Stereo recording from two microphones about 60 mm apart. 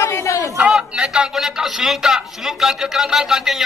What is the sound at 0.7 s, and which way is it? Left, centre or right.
A man's voice, centre.